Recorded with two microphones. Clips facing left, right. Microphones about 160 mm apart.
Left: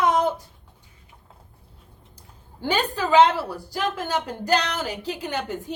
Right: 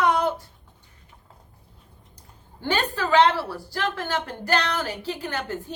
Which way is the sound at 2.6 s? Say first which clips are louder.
Left 1 dB; 10° left (ahead or behind).